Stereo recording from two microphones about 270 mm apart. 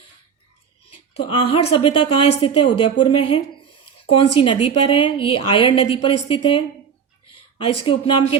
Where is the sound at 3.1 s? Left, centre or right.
Left.